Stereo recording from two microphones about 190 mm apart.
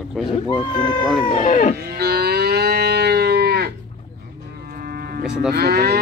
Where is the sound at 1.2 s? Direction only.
35° left (ahead or behind).